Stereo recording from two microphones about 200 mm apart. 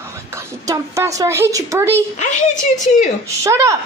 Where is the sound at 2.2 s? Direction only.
35° left (ahead or behind).